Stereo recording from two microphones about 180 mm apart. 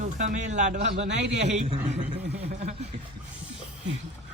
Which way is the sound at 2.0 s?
45° right (ahead or behind).